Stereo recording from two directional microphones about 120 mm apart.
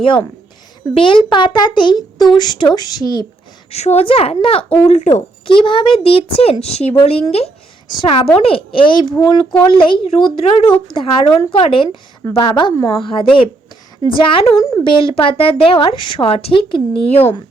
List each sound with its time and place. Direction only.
0.0 s a woman's voice: 45° left (ahead or behind)
3.7 s speech: 60° left (ahead or behind)
5.5 s a woman's voice: 45° left (ahead or behind)
7.9 s a woman's voice: 45° left (ahead or behind); by 17.3 s 60° left (ahead or behind)